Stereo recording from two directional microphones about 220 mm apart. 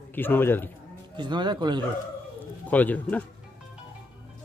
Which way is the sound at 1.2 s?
20° right (ahead or behind).